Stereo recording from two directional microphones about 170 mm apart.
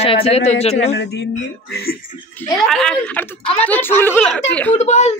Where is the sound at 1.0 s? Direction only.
85° left; by 2.0 s 65° left (ahead or behind).